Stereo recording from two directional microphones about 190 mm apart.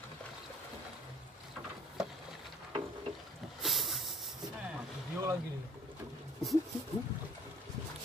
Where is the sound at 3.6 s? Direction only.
Centre (ahead or behind).